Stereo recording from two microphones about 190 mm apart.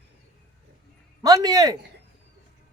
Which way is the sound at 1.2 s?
20° right (ahead or behind).